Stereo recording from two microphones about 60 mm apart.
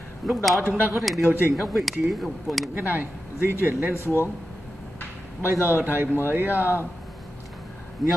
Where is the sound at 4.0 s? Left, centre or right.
Left.